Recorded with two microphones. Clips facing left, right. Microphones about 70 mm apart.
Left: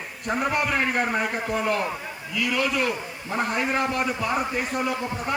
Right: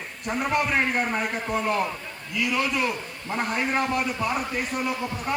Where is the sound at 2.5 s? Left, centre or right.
Right.